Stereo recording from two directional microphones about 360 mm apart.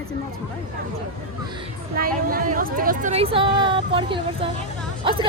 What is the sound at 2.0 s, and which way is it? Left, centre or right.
Speech, right.